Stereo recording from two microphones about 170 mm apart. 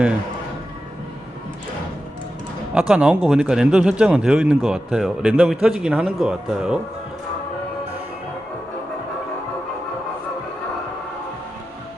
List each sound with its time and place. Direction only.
2.7 s speech: 5° right (ahead or behind)